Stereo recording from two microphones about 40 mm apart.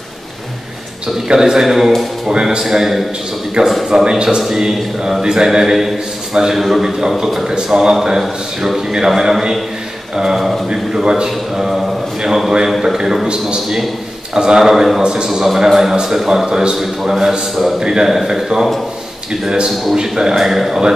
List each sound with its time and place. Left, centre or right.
1.3 s a man's voice: centre
4.1 s a man's voice: centre
11.2 s a man's voice: centre
14.3 s a man's voice: centre
19.7 s a man's voice: centre
20.0 s a man's voice: centre